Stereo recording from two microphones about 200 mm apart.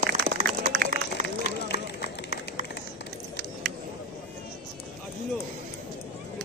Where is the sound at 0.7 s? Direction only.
45° right (ahead or behind).